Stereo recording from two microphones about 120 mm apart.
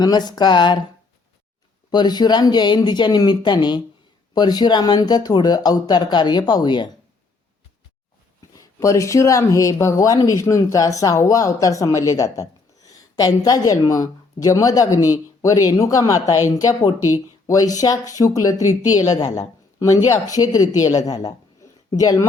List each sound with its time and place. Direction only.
0.0 s speech: 35° left (ahead or behind)
1.9 s speech: 35° left (ahead or behind)
8.5 s speech: 25° left (ahead or behind)